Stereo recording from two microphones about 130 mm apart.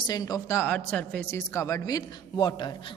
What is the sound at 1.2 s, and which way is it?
A woman's voice, 20° left (ahead or behind).